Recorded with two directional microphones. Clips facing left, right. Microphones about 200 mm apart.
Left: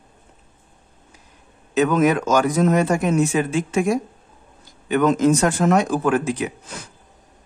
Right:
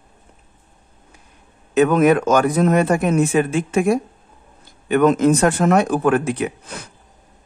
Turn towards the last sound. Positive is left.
turn(degrees=-60)  # may be behind; listen again after turning